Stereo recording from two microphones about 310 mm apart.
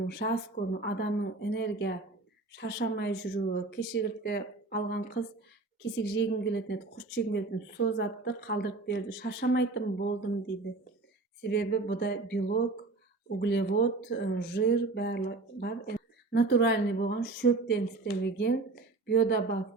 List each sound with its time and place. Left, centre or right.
0.0 s speech: left